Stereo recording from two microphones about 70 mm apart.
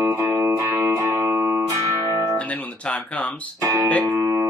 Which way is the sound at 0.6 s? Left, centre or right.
Right.